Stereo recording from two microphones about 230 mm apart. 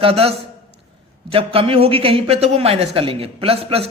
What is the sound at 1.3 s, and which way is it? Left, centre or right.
Speech, right.